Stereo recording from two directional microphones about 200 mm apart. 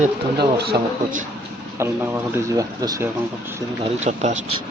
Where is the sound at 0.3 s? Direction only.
50° right (ahead or behind).